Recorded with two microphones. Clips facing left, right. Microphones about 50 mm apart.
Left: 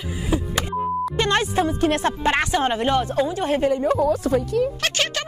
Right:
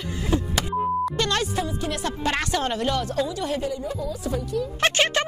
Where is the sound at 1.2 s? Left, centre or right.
Left.